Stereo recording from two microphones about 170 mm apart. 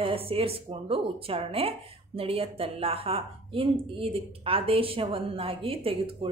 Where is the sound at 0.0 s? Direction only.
35° right (ahead or behind).